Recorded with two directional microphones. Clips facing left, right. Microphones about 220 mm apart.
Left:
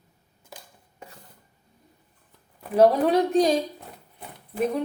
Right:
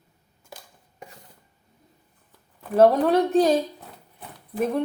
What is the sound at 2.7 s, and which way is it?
Speech, centre (ahead or behind).